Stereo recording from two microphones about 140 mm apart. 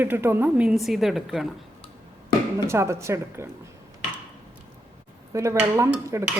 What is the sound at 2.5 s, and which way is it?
Speech, 20° right (ahead or behind).